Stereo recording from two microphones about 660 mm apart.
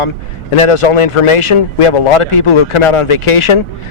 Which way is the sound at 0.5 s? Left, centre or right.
Left.